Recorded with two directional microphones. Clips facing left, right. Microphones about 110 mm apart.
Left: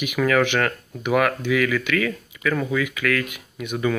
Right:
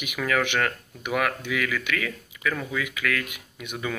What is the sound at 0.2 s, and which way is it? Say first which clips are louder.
Speech: left 5 dB; centre (ahead or behind).